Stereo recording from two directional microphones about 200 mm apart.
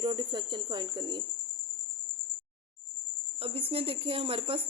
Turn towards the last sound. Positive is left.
turn(degrees=-25)  # may be behind; listen again after turning